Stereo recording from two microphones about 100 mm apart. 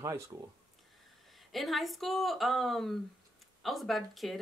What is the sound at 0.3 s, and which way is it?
Speech, 40° right (ahead or behind).